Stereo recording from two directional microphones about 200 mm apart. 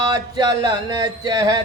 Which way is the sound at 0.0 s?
20° right (ahead or behind).